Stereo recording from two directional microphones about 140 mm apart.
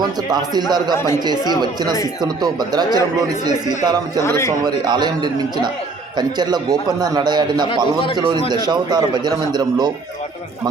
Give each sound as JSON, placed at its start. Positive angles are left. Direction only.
{"t": 0.0, "sound": "a man's voice", "side_deg": -30}
{"t": 2.2, "sound": "a man's voice", "side_deg": -30}
{"t": 4.3, "sound": "a man's voice", "side_deg": 20}
{"t": 4.6, "sound": "a man's voice", "side_deg": -30}